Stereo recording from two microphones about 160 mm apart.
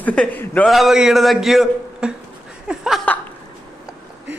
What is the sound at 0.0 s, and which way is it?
A man's voice, 10° left (ahead or behind).